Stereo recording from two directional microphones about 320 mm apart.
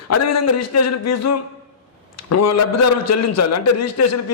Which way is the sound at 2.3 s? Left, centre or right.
Left.